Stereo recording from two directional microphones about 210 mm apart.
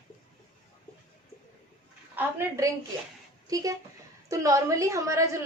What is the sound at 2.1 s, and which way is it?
Speech, 10° right (ahead or behind).